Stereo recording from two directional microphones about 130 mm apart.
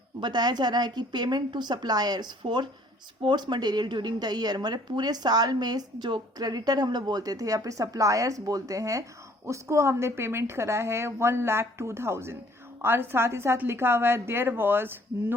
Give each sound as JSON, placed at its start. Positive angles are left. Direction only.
{"t": 0.2, "sound": "a woman's voice", "side_deg": -35}